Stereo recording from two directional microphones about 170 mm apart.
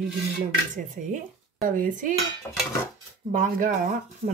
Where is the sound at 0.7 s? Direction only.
45° right (ahead or behind).